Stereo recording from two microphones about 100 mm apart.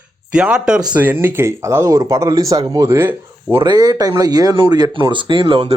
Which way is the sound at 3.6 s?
40° right (ahead or behind).